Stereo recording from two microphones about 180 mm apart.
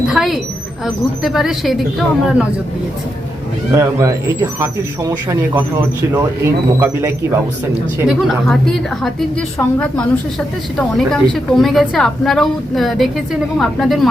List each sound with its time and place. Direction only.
0.1 s a sound: centre (ahead or behind)
0.9 s a woman's voice: centre (ahead or behind)
3.7 s speech: 15° right (ahead or behind)
7.9 s a woman's voice: 5° right (ahead or behind)
9.6 s a woman's voice: 10° left (ahead or behind)